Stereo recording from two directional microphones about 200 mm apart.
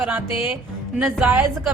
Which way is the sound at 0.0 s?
5° right (ahead or behind).